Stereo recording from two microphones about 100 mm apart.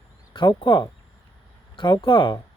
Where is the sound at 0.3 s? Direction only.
50° left (ahead or behind).